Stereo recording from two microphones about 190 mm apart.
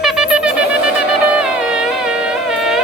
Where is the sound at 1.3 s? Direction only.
5° right (ahead or behind).